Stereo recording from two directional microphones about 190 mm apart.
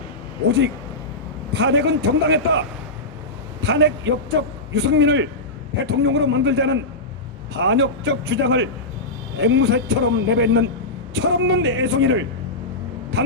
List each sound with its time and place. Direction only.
1.5 s a man's voice: 65° right (ahead or behind); by 12.2 s 85° right